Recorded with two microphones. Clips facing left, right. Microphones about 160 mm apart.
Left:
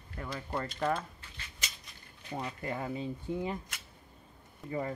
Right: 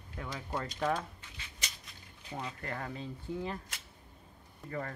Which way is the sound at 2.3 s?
10° left (ahead or behind).